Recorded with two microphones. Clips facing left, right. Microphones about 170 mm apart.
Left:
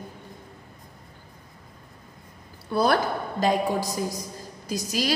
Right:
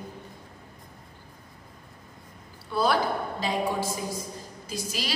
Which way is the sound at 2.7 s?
45° left (ahead or behind).